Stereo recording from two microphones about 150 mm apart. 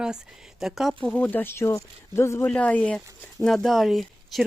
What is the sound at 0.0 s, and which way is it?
Speech, 5° right (ahead or behind).